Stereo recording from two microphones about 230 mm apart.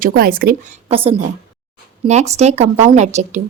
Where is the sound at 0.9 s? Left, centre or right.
Right.